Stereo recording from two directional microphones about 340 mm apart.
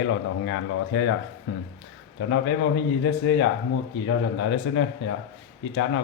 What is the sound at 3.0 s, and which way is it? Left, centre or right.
Speech, left.